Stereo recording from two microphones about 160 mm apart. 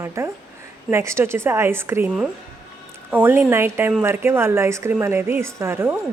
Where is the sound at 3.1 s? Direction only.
15° right (ahead or behind).